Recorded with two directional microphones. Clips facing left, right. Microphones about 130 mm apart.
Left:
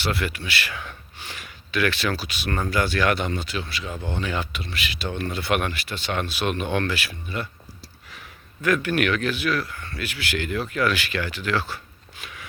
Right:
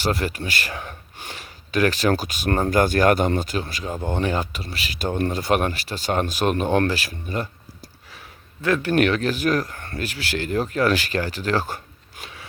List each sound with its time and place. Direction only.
0.0 s speech: 40° right (ahead or behind)
12.2 s biting: 30° right (ahead or behind)